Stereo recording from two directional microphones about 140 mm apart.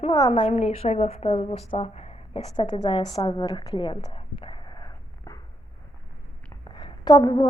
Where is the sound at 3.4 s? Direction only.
25° left (ahead or behind).